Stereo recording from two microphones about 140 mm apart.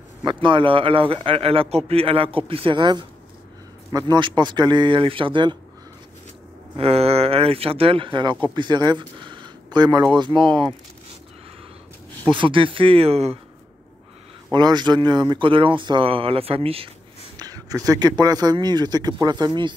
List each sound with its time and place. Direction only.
0.2 s speech: 35° right (ahead or behind)
6.8 s speech: 45° right (ahead or behind)
12.3 s speech: 35° right (ahead or behind)
14.5 s speech: 30° right (ahead or behind)
17.4 s a man's voice: 25° right (ahead or behind)